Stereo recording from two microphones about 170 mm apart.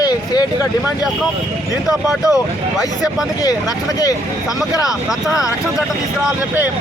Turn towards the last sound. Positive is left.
turn(degrees=0)  # may be behind; listen again after turning